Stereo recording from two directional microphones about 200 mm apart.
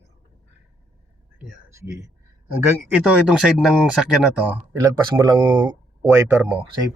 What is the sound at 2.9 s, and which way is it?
Speech, 5° right (ahead or behind).